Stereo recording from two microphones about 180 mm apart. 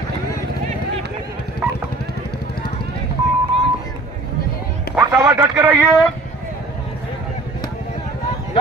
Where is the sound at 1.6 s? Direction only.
15° right (ahead or behind).